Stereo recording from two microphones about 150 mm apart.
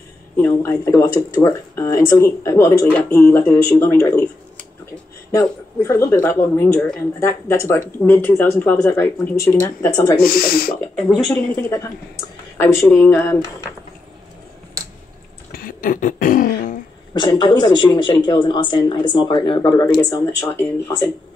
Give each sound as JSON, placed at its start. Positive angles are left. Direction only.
{"t": 0.4, "sound": "speech", "side_deg": 10}
{"t": 5.3, "sound": "speech", "side_deg": 20}
{"t": 10.1, "sound": "speech", "side_deg": 85}
{"t": 12.5, "sound": "speech", "side_deg": 20}
{"t": 15.5, "sound": "a sound", "side_deg": 65}
{"t": 17.1, "sound": "speech", "side_deg": 30}